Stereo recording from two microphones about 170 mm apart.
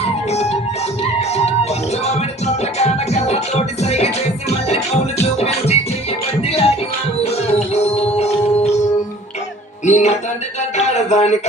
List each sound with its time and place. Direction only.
0.0 s music: 40° left (ahead or behind)
9.8 s music: 45° left (ahead or behind)